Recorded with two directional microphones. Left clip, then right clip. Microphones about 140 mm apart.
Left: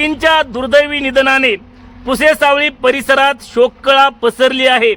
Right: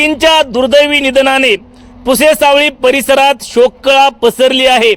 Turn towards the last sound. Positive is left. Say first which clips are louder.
# right 3 dB
turn(degrees=-25)  # may be behind; listen again after turning